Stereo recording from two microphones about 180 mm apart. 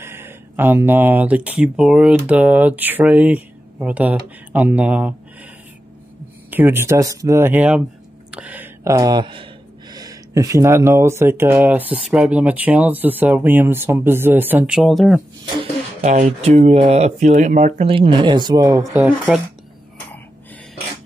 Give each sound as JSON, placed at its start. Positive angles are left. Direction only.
{"t": 0.0, "sound": "speech", "side_deg": -15}
{"t": 6.5, "sound": "speech", "side_deg": -10}
{"t": 16.0, "sound": "speech", "side_deg": -40}
{"t": 18.9, "sound": "speech", "side_deg": -5}